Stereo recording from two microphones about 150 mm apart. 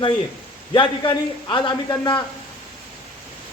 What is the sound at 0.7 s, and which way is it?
A man's voice, 30° left (ahead or behind).